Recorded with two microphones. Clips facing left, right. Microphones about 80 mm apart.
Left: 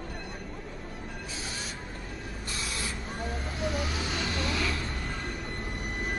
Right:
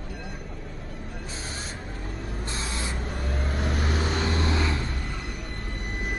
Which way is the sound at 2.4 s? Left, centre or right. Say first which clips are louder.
Right 2 dB; right.